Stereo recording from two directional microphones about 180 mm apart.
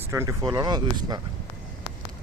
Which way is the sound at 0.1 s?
15° right (ahead or behind).